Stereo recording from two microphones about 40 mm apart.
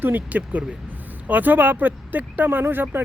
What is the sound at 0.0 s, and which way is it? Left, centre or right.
Speech, right.